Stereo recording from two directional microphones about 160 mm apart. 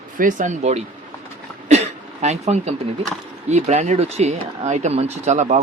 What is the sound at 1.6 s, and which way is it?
Throat clearing, 45° right (ahead or behind).